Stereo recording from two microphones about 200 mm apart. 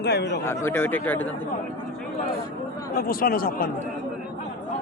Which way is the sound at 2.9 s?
45° left (ahead or behind).